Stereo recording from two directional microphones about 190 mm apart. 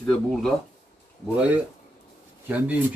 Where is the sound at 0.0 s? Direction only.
Centre (ahead or behind).